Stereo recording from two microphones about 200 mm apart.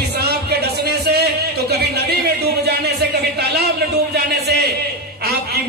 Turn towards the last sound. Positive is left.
turn(degrees=-55)  # may be behind; listen again after turning